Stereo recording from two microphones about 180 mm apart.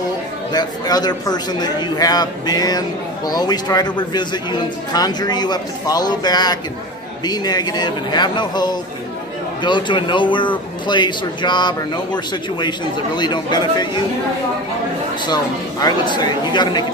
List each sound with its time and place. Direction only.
0.5 s speech: 20° left (ahead or behind)
15.8 s speech: 25° left (ahead or behind)